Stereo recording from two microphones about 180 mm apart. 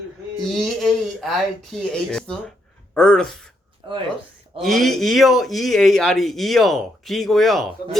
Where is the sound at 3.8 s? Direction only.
30° right (ahead or behind).